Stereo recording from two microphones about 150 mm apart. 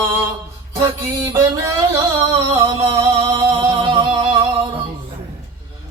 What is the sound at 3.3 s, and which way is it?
Music, 35° right (ahead or behind).